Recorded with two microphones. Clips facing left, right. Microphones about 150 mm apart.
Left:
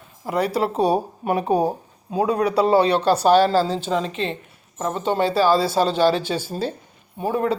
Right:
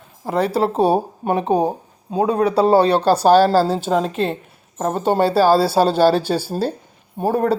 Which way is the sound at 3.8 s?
50° right (ahead or behind).